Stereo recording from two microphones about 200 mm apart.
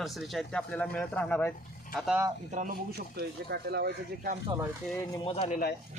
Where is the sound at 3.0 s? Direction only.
55° right (ahead or behind).